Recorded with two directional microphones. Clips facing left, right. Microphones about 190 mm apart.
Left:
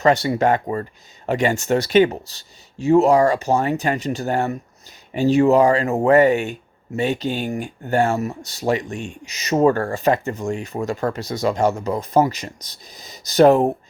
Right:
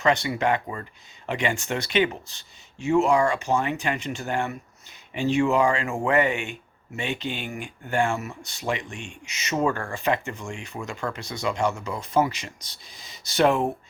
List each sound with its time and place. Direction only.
0.0 s speech: 40° left (ahead or behind)